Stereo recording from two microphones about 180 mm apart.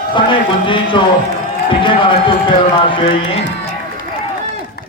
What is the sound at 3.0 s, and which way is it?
Music, 30° left (ahead or behind).